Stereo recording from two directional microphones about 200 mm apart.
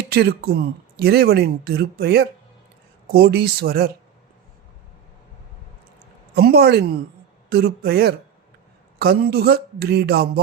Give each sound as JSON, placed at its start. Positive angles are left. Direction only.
{"t": 0.1, "sound": "speech", "side_deg": -50}
{"t": 6.3, "sound": "speech", "side_deg": -50}